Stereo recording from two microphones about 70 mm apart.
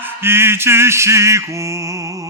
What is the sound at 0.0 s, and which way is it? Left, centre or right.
Male singing, right.